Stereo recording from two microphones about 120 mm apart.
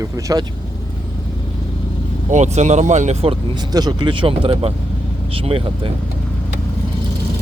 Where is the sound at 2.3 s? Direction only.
75° right (ahead or behind); by 3.3 s 60° right (ahead or behind).